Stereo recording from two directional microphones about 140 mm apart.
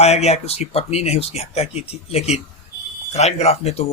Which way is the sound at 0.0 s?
50° left (ahead or behind).